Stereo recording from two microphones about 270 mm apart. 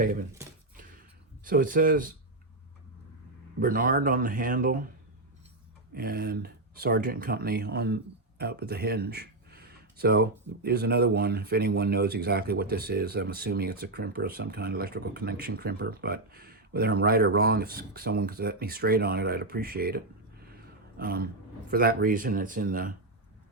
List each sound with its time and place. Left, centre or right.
0.0 s speech: right
1.5 s speech: right
3.6 s speech: right
5.9 s speech: right
21.0 s speech: right